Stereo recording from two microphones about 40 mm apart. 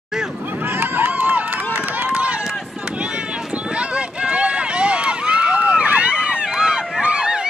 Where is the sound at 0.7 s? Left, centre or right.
Right.